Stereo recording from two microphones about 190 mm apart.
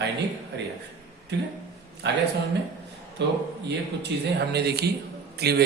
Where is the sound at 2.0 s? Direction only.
65° right (ahead or behind).